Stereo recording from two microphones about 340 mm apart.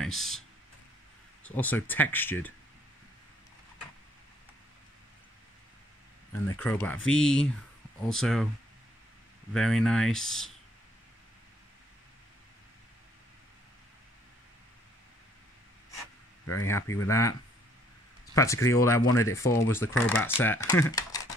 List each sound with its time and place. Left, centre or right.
0.0 s speech: centre
1.4 s speech: centre
6.4 s speech: centre
9.5 s speech: centre
16.4 s speech: left
16.8 s speech: centre
18.3 s speech: centre